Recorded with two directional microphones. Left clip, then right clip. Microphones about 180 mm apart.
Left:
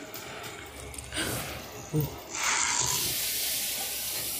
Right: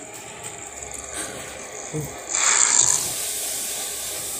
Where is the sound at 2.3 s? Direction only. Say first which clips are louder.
Right 8 dB; 35° right (ahead or behind).